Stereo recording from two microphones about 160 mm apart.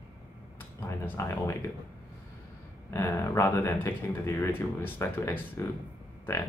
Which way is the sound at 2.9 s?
15° left (ahead or behind).